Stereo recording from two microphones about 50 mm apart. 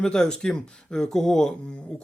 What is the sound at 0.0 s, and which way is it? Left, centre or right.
Speech, centre.